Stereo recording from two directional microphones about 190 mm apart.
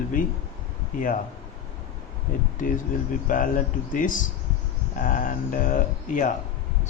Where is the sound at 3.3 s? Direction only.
45° left (ahead or behind).